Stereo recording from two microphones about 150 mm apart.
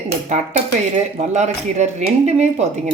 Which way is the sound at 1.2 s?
50° right (ahead or behind).